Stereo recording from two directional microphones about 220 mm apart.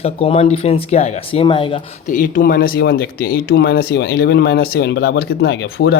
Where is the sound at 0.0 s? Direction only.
25° left (ahead or behind).